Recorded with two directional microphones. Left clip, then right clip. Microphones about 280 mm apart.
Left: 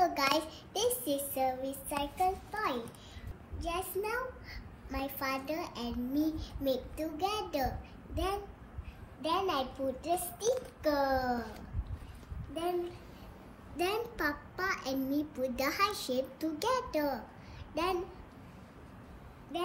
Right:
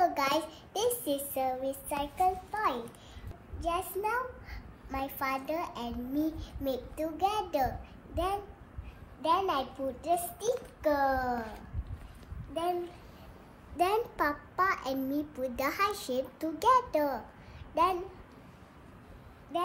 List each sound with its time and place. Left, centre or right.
0.0 s a sound: centre
1.3 s child singing: centre
3.5 s a child's voice: centre
13.7 s a child's voice: centre
14.9 s a child's voice: centre
15.1 s a child's voice: centre